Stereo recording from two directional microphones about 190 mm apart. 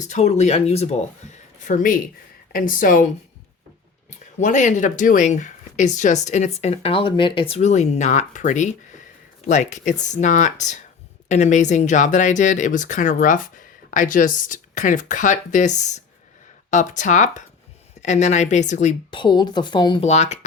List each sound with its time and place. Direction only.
0.0 s speech: 40° left (ahead or behind)
1.6 s speech: 45° left (ahead or behind)
4.4 s speech: 40° left (ahead or behind)
19.1 s speech: 25° left (ahead or behind)
20.1 s speech: 35° left (ahead or behind)